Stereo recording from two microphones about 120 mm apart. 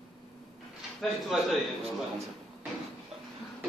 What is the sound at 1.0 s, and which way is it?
Speech, centre (ahead or behind).